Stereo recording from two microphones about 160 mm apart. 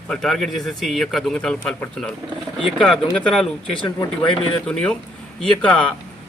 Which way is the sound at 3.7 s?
30° left (ahead or behind).